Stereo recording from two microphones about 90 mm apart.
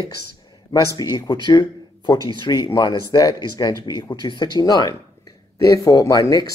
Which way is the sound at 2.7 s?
45° left (ahead or behind).